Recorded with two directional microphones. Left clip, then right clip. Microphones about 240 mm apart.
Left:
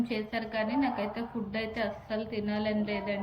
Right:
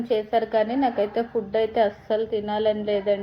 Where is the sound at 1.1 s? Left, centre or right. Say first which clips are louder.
Right 12 dB; right.